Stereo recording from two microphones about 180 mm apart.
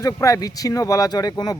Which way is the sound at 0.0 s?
20° left (ahead or behind).